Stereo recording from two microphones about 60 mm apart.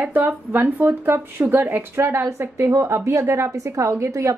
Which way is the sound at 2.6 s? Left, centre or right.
Right.